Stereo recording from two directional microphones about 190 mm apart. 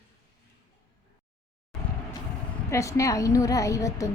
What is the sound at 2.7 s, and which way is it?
A woman's voice, 15° left (ahead or behind).